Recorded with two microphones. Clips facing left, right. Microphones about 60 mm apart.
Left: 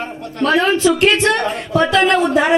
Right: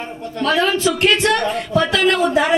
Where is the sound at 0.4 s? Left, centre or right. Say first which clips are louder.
Left 3 dB; left.